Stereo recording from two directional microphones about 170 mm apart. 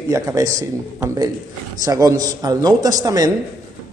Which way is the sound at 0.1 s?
20° right (ahead or behind).